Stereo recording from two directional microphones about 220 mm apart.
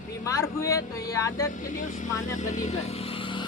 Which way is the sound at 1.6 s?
35° left (ahead or behind).